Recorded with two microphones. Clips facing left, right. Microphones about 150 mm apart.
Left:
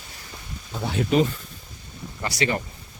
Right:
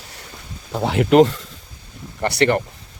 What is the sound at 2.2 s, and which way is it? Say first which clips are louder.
Speech: right 8 dB; 60° right (ahead or behind).